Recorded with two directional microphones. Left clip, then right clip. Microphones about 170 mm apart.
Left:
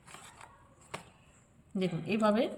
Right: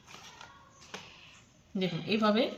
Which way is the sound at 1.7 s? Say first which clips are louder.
Right 1 dB; 15° left (ahead or behind).